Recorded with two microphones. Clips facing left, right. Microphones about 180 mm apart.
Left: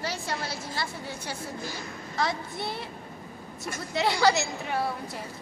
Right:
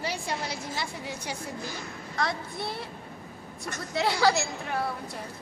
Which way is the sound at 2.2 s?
Centre (ahead or behind).